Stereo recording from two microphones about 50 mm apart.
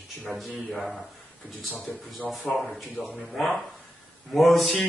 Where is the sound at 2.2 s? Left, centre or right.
Left.